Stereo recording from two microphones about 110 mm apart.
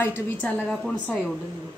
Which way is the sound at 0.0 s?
20° left (ahead or behind).